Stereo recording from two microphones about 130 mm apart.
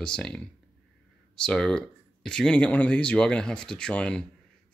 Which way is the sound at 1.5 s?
5° left (ahead or behind).